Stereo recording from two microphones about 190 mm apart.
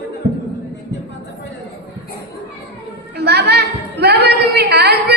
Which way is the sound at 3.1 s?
60° right (ahead or behind).